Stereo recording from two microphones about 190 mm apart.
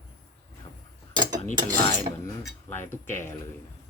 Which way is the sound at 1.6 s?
45° right (ahead or behind).